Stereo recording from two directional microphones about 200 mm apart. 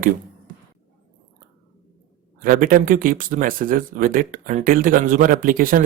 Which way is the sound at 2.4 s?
45° right (ahead or behind).